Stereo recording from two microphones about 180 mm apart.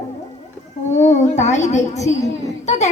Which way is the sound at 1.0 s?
40° left (ahead or behind).